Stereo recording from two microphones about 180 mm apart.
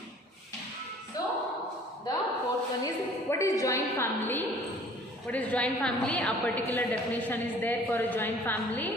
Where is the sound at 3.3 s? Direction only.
15° left (ahead or behind).